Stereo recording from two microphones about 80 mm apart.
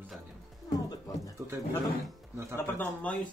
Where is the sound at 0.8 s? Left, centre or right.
Left.